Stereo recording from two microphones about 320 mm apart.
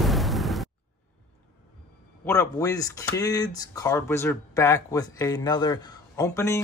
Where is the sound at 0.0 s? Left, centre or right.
Centre.